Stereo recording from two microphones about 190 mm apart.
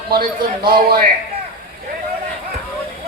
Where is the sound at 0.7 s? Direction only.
50° right (ahead or behind).